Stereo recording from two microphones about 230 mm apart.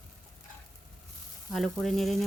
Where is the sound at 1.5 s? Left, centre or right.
Centre.